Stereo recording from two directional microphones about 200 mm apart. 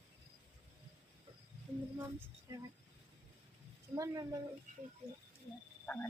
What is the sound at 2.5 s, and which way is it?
Speech, 15° right (ahead or behind).